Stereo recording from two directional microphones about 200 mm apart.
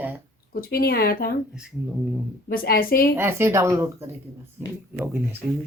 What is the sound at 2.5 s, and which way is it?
Speech, 45° left (ahead or behind).